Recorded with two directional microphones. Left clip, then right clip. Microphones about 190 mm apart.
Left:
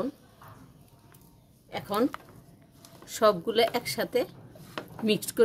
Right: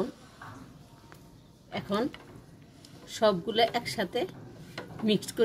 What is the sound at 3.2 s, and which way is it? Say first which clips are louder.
A woman's voice: left 2 dB; 65° left (ahead or behind).